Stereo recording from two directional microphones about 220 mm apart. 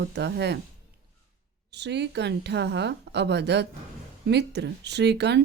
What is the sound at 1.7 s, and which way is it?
Speech, 50° right (ahead or behind).